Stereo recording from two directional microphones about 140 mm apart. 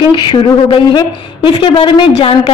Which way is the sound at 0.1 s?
35° left (ahead or behind).